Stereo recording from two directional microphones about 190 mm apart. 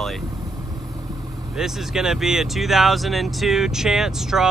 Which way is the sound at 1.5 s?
5° right (ahead or behind).